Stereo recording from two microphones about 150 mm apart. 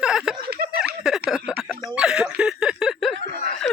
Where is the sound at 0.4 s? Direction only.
90° right.